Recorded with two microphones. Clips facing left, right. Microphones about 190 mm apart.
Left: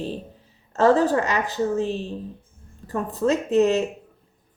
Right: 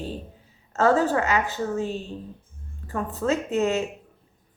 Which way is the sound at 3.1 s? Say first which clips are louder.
Left 3 dB; 35° left (ahead or behind).